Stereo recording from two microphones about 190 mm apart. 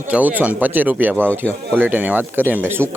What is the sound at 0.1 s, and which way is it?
Speech, 10° right (ahead or behind).